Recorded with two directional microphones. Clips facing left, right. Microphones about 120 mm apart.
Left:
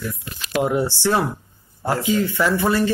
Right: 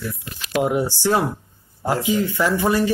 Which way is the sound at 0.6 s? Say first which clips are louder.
Even; 15° right (ahead or behind).